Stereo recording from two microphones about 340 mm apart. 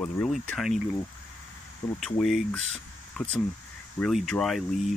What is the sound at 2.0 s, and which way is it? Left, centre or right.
Speech, centre.